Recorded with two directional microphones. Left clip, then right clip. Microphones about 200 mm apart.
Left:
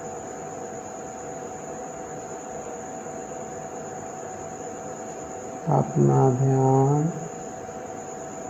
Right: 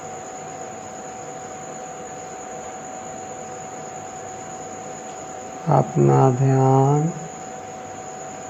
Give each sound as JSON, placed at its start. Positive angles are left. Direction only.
{"t": 5.6, "sound": "cricket", "side_deg": -30}